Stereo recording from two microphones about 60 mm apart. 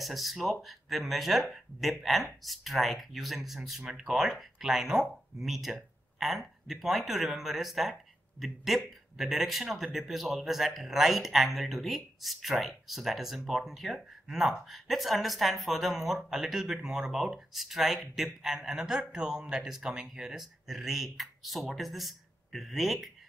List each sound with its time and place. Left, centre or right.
0.0 s a man's voice: centre